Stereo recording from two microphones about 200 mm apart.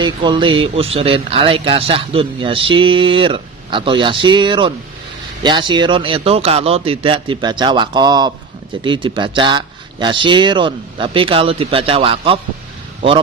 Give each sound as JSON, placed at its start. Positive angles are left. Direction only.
{"t": 0.0, "sound": "speech", "side_deg": -25}